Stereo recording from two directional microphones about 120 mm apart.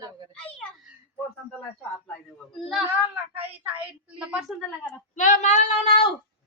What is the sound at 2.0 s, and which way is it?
Speech, 10° left (ahead or behind).